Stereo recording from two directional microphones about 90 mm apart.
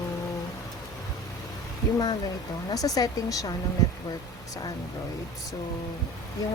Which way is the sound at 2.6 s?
45° left (ahead or behind).